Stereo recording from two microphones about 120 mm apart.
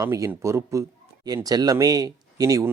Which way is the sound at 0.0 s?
25° right (ahead or behind).